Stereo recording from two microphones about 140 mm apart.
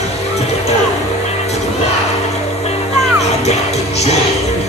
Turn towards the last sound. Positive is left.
turn(degrees=50)  # may be behind; listen again after turning